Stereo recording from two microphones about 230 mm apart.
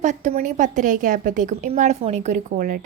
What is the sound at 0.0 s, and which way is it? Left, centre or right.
A woman's voice, right.